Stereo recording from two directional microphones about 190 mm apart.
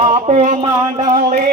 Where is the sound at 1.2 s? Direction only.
45° right (ahead or behind).